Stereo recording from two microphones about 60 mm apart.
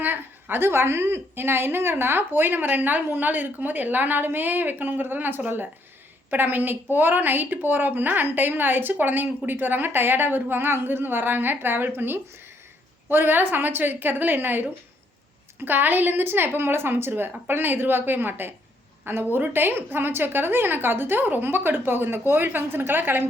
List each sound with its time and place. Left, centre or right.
0.0 s a woman's voice: right